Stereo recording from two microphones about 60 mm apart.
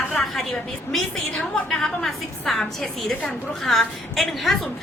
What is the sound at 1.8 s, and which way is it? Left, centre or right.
A woman's voice, centre.